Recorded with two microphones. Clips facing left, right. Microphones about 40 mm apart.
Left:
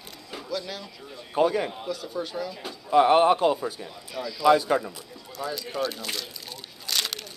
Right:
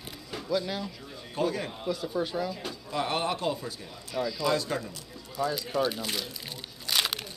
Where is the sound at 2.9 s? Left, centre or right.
Left.